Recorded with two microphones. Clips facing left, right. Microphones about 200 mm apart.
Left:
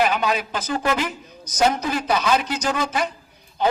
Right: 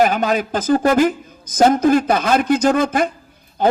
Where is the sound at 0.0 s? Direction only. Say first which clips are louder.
Right 5 dB; 45° right (ahead or behind).